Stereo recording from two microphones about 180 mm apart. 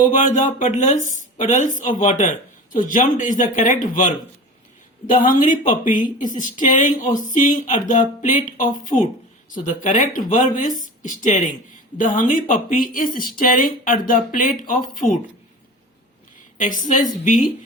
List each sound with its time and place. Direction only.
0.1 s a woman's voice: 45° left (ahead or behind)
16.6 s a woman's voice: 45° left (ahead or behind)